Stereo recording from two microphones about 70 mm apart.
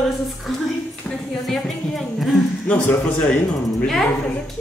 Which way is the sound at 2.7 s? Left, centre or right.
Left.